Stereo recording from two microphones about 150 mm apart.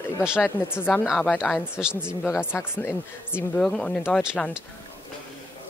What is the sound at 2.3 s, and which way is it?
Speech, 15° left (ahead or behind).